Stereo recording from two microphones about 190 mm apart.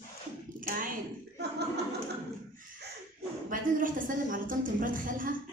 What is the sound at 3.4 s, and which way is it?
A woman's voice, 45° right (ahead or behind).